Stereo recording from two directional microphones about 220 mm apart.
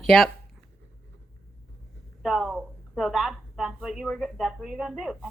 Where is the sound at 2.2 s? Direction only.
Centre (ahead or behind).